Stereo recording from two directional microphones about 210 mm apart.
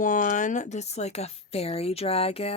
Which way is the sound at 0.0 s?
40° left (ahead or behind).